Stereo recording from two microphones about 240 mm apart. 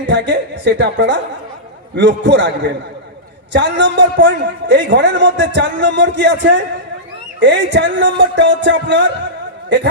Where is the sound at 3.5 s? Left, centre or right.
Right.